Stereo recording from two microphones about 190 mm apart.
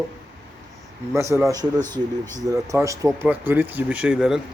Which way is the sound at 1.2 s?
15° right (ahead or behind).